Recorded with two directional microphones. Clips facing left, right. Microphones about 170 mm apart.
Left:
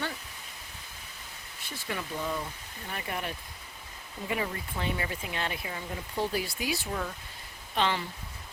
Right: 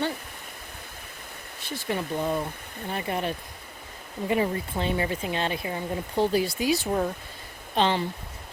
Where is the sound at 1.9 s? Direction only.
30° right (ahead or behind).